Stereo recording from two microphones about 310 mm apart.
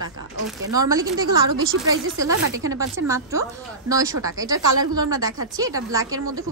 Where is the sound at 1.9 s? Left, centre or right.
Right.